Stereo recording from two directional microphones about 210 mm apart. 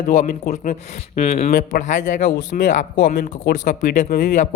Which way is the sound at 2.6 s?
35° left (ahead or behind).